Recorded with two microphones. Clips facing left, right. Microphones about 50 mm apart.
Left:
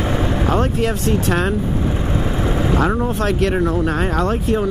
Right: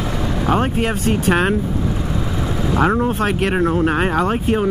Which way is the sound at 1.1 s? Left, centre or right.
Right.